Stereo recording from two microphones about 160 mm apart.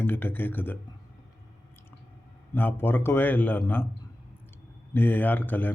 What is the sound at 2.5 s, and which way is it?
A man's voice, 15° left (ahead or behind).